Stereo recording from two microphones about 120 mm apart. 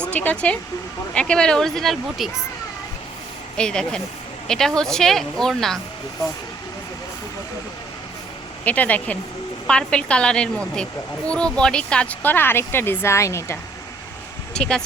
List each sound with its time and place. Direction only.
0.0 s a woman's voice: 10° left (ahead or behind)
3.6 s a woman's voice: 5° left (ahead or behind)
8.6 s speech: 15° left (ahead or behind)
14.5 s speech: 5° left (ahead or behind)